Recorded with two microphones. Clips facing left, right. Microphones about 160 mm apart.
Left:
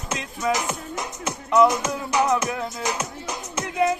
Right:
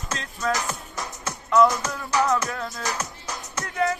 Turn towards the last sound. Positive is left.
turn(degrees=20)  # may be behind; listen again after turning